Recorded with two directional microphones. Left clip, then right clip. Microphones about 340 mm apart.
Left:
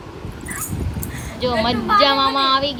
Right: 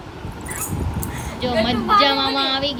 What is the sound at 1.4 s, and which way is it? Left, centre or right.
A woman's voice, centre.